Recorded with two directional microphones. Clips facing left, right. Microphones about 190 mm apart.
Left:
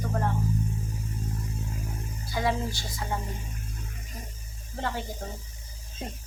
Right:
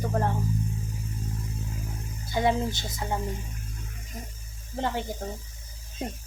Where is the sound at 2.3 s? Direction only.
20° right (ahead or behind).